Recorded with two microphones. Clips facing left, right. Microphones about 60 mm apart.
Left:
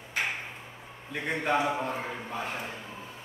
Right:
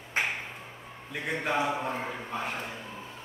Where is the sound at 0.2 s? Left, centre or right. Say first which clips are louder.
Right 2 dB; right.